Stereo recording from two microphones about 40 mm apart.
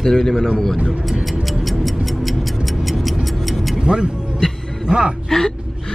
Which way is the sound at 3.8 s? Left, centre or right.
Right.